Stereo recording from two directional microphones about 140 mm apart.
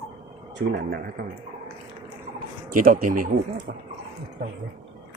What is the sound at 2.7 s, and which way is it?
Speech, 85° right.